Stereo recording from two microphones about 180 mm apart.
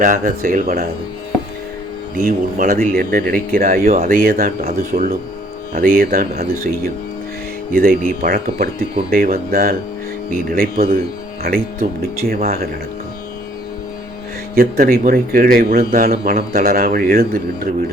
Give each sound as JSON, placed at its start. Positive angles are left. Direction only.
{"t": 0.0, "sound": "speech", "side_deg": -50}
{"t": 2.2, "sound": "speech", "side_deg": -50}
{"t": 4.2, "sound": "speech", "side_deg": -55}
{"t": 7.7, "sound": "speech", "side_deg": -50}
{"t": 14.5, "sound": "speech", "side_deg": -55}